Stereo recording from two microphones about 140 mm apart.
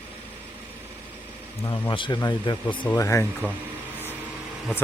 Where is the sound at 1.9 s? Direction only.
35° left (ahead or behind).